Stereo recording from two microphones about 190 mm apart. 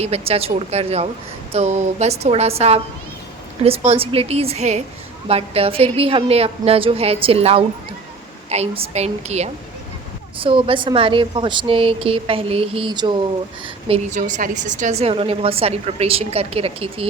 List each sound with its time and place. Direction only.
0.0 s a woman's voice: 30° right (ahead or behind)
14.2 s a woman's voice: 40° right (ahead or behind)